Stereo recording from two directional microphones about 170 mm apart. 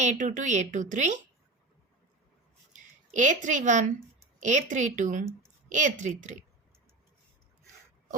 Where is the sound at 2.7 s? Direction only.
45° right (ahead or behind).